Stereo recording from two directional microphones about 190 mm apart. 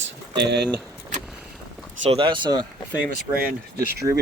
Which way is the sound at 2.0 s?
25° right (ahead or behind).